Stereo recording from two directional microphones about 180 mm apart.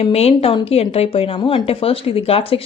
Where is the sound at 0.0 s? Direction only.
35° left (ahead or behind).